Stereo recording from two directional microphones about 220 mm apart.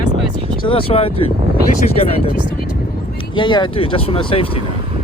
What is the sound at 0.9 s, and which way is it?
Speech, 25° left (ahead or behind).